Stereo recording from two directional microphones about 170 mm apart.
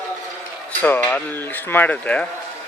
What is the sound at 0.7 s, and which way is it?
Speech, 10° left (ahead or behind).